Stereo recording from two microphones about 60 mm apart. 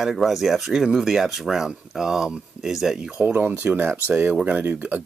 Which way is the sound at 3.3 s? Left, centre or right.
Right.